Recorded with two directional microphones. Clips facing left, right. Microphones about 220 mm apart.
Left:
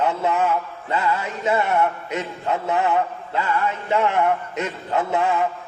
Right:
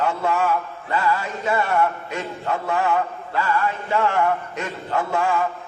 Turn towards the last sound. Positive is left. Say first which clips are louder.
# left 1 dB
turn(degrees=20)  # may be behind; listen again after turning